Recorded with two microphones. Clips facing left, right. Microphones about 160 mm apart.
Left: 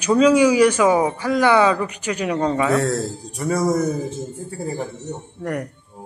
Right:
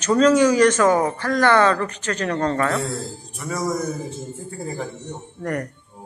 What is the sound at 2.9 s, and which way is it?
Speech, 55° left (ahead or behind).